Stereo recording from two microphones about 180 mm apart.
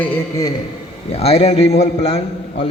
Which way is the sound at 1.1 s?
35° left (ahead or behind).